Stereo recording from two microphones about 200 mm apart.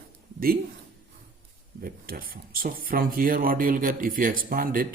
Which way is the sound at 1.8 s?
45° right (ahead or behind).